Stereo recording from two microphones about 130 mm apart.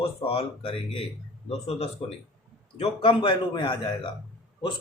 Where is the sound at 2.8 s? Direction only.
40° left (ahead or behind).